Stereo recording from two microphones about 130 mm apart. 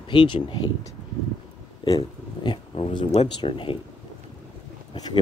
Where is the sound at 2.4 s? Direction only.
40° left (ahead or behind).